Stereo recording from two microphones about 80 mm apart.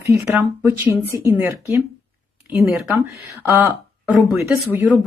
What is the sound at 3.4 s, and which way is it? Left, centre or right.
Speech, right.